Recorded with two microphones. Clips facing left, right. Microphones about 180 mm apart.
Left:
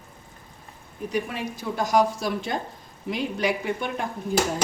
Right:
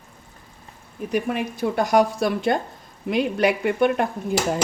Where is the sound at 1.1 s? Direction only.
55° right (ahead or behind).